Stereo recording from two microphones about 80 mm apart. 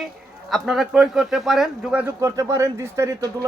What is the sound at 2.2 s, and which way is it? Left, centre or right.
Speech, right.